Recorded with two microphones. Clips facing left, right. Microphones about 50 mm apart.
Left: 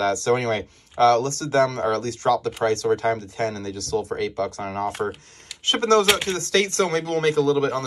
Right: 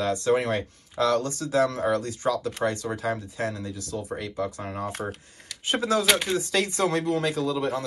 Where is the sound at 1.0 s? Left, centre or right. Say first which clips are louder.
Left 6 dB; left.